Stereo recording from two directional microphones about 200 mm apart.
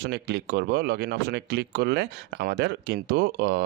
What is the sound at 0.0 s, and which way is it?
Speech, 55° right (ahead or behind).